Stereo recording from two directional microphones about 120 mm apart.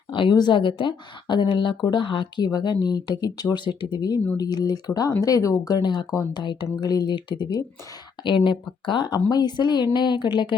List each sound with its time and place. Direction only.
0.1 s speech: 45° left (ahead or behind)